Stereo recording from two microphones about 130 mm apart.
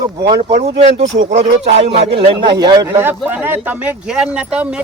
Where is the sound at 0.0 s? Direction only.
30° right (ahead or behind).